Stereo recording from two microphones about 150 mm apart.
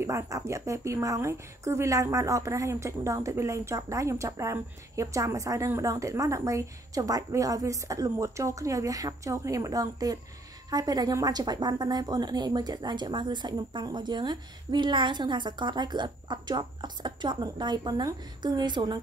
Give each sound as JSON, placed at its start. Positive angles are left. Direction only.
{"t": 0.0, "sound": "a woman's voice", "side_deg": -20}